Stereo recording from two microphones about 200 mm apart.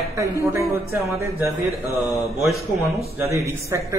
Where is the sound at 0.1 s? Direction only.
15° right (ahead or behind).